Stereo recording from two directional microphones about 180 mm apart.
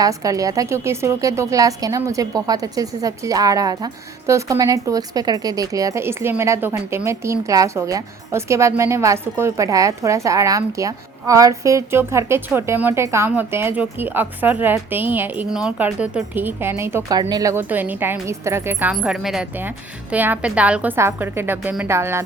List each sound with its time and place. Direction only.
0.0 s a woman's voice: 20° right (ahead or behind)